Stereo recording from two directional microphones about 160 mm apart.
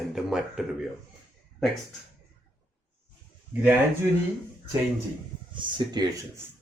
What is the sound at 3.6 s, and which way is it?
Speech, 10° right (ahead or behind).